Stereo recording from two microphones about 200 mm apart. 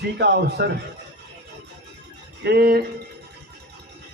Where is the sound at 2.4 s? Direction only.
55° right (ahead or behind).